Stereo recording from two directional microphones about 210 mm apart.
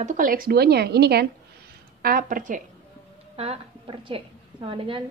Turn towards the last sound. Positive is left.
turn(degrees=-25)  # may be behind; listen again after turning